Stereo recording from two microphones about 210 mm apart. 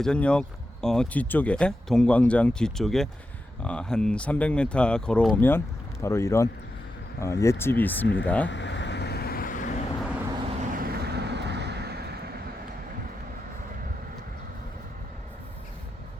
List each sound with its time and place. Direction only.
0.0 s speech: 5° left (ahead or behind)
8.0 s speech: 60° left (ahead or behind)
8.4 s vehicle: 60° left (ahead or behind); by 9.8 s 40° left (ahead or behind)
10.8 s vehicle: 45° right (ahead or behind)